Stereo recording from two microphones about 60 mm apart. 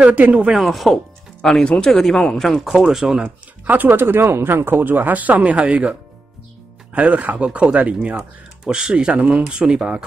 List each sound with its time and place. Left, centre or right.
0.0 s speech: right
0.5 s speech: centre
1.4 s speech: centre
2.7 s speech: centre
3.6 s speech: right; by 10.0 s centre